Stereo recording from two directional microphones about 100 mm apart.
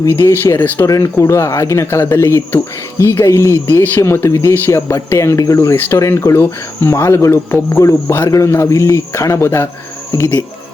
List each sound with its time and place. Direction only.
0.0 s speech: 25° left (ahead or behind)